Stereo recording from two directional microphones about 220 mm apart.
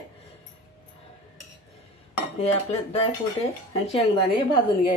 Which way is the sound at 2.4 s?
25° left (ahead or behind).